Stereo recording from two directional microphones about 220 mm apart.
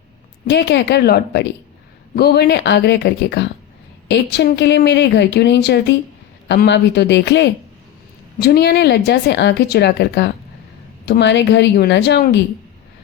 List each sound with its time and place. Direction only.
0.4 s speech: 50° left (ahead or behind)